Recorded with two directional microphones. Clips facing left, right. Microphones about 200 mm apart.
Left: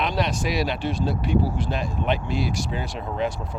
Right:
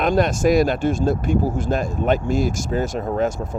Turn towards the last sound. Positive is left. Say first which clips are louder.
# right 6 dB
turn(degrees=-45)  # may be behind; listen again after turning